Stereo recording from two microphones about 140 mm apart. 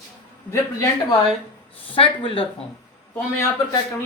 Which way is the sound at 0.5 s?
25° left (ahead or behind).